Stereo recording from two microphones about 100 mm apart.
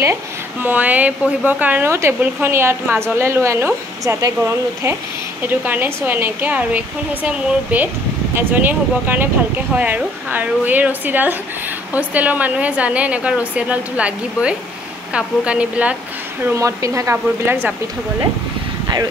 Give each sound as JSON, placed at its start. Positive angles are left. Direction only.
{"t": 0.0, "sound": "a woman's voice", "side_deg": -20}
{"t": 16.5, "sound": "speech", "side_deg": -30}